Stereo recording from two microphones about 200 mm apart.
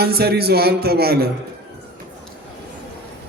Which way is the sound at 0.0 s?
50° right (ahead or behind).